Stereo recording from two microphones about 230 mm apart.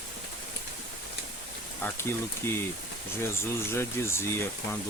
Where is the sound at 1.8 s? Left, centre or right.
Centre.